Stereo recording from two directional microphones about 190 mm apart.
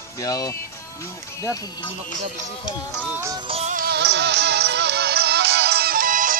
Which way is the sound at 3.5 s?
40° right (ahead or behind).